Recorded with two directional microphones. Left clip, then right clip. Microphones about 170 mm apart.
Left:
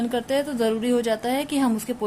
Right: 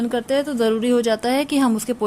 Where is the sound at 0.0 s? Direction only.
25° right (ahead or behind).